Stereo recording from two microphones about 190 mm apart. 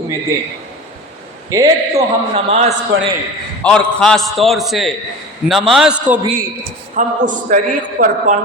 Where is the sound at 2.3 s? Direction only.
35° right (ahead or behind).